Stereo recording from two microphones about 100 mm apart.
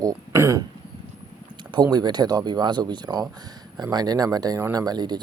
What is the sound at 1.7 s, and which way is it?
Speech, 40° right (ahead or behind).